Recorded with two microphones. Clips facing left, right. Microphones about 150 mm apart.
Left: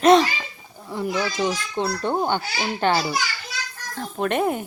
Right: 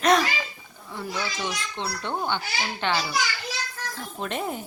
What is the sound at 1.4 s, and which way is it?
A woman's voice, 40° left (ahead or behind).